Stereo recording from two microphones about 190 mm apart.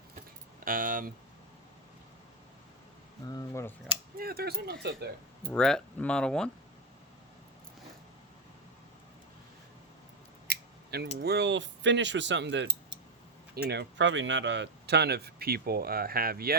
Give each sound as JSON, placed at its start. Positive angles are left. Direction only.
{"t": 0.6, "sound": "speech", "side_deg": -45}
{"t": 3.2, "sound": "speech", "side_deg": 15}
{"t": 4.2, "sound": "speech", "side_deg": -55}
{"t": 5.5, "sound": "speech", "side_deg": 5}
{"t": 10.4, "sound": "speech", "side_deg": -55}
{"t": 13.7, "sound": "speech", "side_deg": -70}